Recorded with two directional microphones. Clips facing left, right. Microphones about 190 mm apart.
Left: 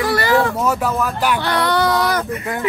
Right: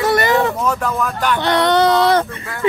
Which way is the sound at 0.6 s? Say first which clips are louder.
Left 1 dB; 5° left (ahead or behind).